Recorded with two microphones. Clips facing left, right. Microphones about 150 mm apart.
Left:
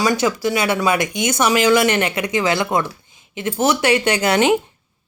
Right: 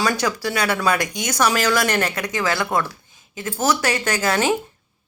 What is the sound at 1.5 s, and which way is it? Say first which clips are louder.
Speech: left 5 dB; 15° left (ahead or behind).